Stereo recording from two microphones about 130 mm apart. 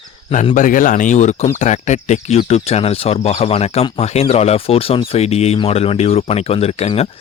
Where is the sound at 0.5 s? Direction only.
90° left.